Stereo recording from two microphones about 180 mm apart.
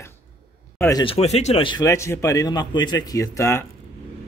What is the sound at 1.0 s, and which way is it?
A man's voice, 35° left (ahead or behind).